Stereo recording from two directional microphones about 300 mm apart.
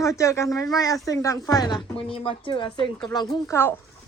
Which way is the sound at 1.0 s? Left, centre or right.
Centre.